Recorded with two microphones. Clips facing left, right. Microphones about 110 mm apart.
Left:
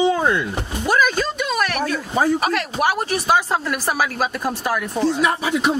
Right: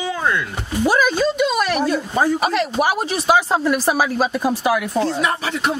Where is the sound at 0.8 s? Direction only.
10° right (ahead or behind).